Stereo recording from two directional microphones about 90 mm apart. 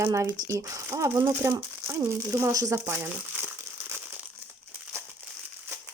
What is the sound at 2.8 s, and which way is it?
Crumpling, 25° right (ahead or behind).